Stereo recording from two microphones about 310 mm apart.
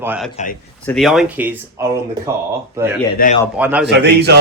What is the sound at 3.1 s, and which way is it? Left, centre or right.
Speech, left.